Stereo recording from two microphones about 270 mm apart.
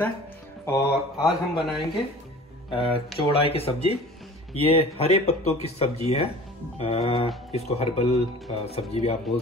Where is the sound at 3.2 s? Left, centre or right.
Left.